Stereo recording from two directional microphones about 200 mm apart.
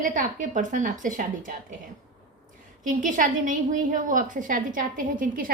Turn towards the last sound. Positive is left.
turn(degrees=-45)  # may be behind; listen again after turning